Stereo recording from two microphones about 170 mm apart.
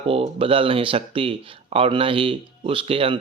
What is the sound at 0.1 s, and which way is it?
Speech, 35° right (ahead or behind).